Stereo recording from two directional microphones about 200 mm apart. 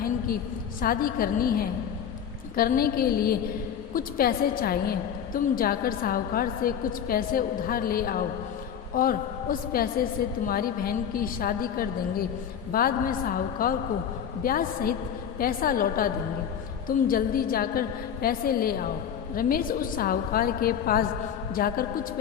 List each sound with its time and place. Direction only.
0.8 s a woman's voice: 45° left (ahead or behind)